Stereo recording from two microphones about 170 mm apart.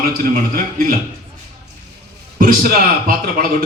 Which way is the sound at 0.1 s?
60° right (ahead or behind).